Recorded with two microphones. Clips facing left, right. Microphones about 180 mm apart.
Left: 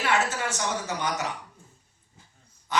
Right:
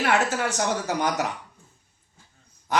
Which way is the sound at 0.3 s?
60° right (ahead or behind).